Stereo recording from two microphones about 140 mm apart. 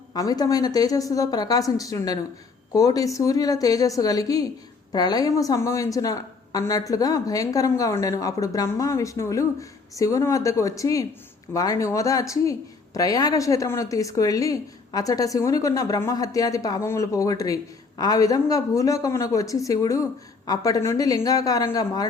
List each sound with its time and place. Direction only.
0.1 s speech: 25° left (ahead or behind)